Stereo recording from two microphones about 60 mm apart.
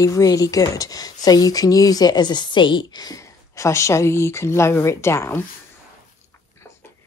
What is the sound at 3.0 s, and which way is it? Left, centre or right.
Speech, left.